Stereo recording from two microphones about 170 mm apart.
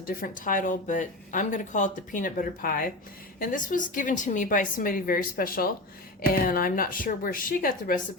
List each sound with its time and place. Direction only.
0.0 s a woman's voice: 55° left (ahead or behind)